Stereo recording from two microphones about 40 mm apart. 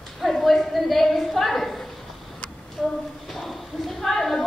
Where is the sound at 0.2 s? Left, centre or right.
Centre.